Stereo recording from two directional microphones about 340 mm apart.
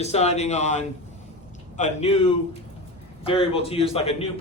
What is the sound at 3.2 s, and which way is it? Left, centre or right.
Speech, centre.